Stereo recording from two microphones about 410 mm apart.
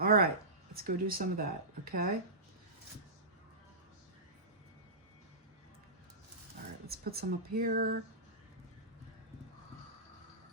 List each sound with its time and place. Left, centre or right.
0.0 s a sound: right
0.7 s speech: right
6.8 s speech: right